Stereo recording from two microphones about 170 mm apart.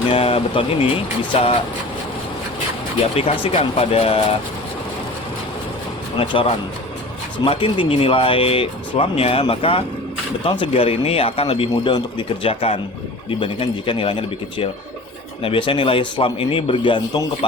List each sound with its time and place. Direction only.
0.1 s speech: 35° left (ahead or behind)
3.0 s speech: 35° left (ahead or behind)
6.1 s speech: 35° left (ahead or behind)